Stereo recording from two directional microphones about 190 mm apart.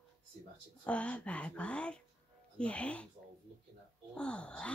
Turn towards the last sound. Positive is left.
turn(degrees=5)  # may be behind; listen again after turning